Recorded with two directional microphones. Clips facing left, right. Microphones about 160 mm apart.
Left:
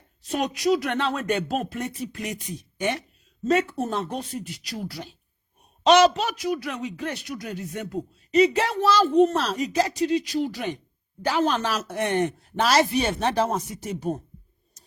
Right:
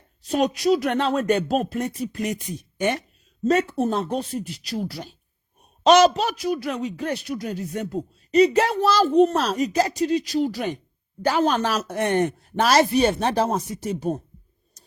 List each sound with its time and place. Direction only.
0.3 s speech: 35° right (ahead or behind)
3.4 s speech: 35° right (ahead or behind)
5.8 s speech: 40° right (ahead or behind)